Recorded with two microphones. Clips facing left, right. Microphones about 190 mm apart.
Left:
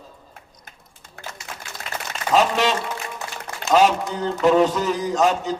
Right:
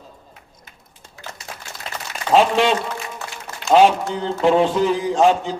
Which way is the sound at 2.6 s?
40° left (ahead or behind).